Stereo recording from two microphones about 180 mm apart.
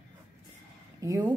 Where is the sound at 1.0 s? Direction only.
15° right (ahead or behind).